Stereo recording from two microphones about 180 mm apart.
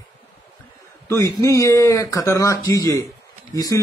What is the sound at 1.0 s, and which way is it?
Speech, 20° left (ahead or behind).